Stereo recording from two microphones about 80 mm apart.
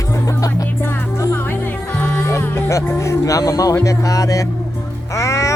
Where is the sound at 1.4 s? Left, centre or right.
Left.